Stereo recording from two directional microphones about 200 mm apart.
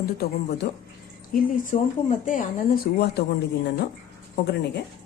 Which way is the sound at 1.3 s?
40° left (ahead or behind).